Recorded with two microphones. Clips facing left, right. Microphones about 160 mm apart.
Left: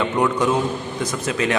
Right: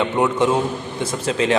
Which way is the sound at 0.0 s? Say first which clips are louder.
Right 1 dB; 25° right (ahead or behind).